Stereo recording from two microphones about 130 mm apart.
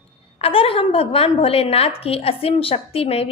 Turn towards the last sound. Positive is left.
turn(degrees=50)  # may be behind; listen again after turning